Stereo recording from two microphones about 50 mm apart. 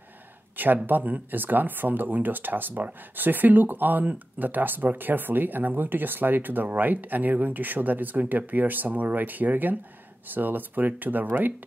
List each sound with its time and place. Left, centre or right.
0.8 s speech: right